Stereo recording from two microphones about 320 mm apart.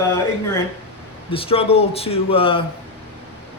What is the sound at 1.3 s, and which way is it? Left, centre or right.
Speech, centre.